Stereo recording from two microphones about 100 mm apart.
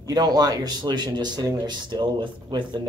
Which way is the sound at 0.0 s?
45° right (ahead or behind).